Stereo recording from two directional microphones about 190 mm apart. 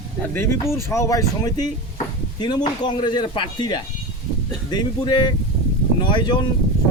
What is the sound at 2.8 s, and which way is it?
Speech, 25° left (ahead or behind).